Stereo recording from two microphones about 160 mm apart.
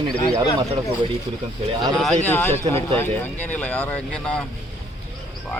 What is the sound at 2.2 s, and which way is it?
Speech, 10° left (ahead or behind).